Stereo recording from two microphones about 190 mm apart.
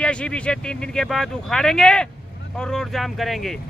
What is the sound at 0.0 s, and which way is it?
Speech, 5° left (ahead or behind).